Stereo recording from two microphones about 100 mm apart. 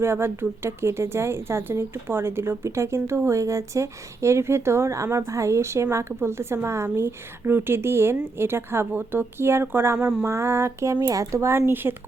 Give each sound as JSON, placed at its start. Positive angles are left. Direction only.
{"t": 0.0, "sound": "speech", "side_deg": -25}